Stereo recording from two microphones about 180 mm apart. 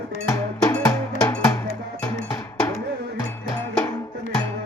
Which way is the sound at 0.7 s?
20° left (ahead or behind).